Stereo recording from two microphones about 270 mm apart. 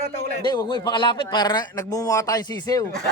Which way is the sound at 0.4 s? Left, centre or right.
Centre.